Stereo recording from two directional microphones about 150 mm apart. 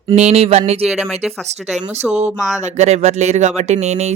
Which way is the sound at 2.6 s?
45° right (ahead or behind).